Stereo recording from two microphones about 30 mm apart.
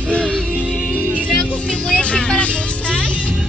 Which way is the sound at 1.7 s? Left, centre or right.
Left.